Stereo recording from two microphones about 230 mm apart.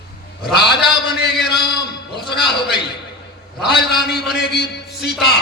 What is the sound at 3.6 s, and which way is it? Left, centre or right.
A man's voice, left.